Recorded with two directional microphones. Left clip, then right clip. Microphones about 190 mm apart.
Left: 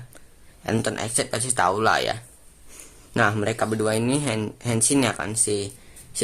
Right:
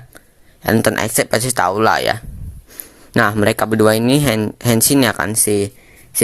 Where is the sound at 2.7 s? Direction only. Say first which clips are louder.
Right 9 dB; 30° right (ahead or behind).